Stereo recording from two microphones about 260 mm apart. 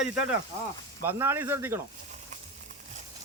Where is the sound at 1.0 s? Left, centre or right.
Centre.